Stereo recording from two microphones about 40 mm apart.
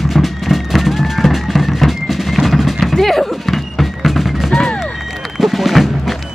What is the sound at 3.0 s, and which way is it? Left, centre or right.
Music, centre.